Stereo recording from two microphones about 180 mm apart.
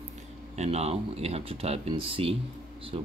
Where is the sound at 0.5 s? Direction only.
35° right (ahead or behind).